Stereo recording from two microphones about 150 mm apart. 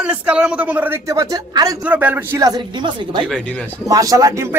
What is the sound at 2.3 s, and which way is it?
Speech, 25° right (ahead or behind).